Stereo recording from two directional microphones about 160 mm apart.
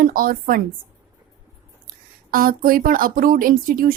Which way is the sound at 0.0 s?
65° right (ahead or behind).